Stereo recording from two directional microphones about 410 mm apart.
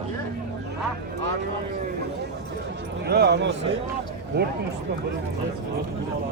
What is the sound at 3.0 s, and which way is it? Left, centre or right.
Speech, right.